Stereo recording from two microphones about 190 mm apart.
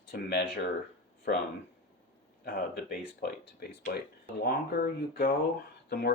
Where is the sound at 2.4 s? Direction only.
50° left (ahead or behind).